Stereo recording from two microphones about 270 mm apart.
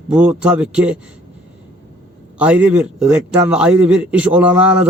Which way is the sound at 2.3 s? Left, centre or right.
Centre.